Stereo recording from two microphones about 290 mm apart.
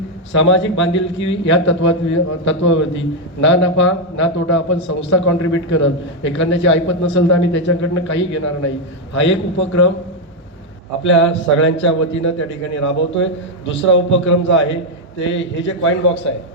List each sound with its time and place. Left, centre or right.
0.3 s a man's voice: left
11.0 s a man's voice: left